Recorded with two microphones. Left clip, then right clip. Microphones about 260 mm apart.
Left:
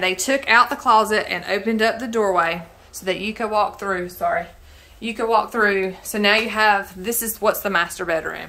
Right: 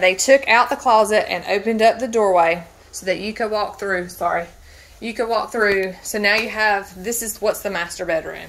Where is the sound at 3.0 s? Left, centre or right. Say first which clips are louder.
Right 2 dB; centre.